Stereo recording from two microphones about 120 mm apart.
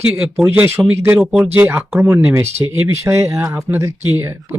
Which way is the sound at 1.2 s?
5° right (ahead or behind).